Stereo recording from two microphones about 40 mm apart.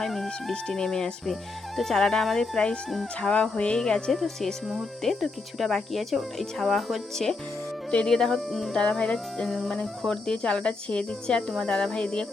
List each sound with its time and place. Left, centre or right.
0.0 s speech: centre
1.2 s speech: centre
3.2 s speech: left
4.1 s speech: centre
7.9 s speech: centre
8.7 s speech: left
9.1 s speech: centre; by 12.3 s left